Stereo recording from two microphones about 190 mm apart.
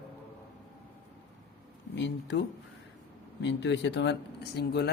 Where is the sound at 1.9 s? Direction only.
65° left (ahead or behind).